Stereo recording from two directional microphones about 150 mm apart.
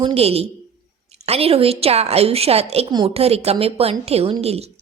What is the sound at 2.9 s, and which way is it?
Speech, 30° right (ahead or behind).